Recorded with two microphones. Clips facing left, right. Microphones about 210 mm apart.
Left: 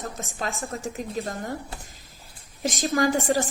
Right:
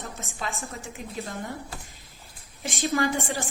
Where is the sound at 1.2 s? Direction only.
45° left (ahead or behind).